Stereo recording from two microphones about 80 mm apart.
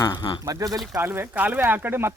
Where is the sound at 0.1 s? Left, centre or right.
Left.